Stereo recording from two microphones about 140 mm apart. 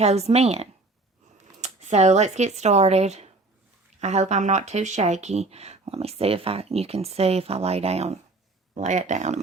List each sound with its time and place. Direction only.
0.0 s speech: 50° right (ahead or behind)